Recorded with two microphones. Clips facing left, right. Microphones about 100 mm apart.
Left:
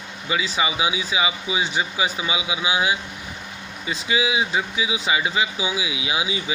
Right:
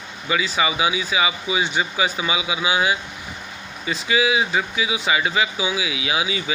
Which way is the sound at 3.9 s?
20° left (ahead or behind).